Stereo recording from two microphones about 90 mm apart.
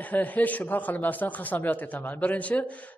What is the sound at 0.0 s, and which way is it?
A man's voice, 15° left (ahead or behind).